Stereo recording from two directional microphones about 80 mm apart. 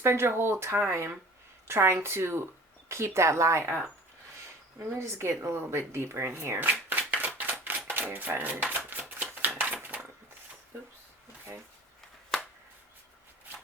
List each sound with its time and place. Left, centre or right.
0.0 s speech: right
4.8 s speech: right
7.3 s typewriter: right
7.9 s shuffling cards: right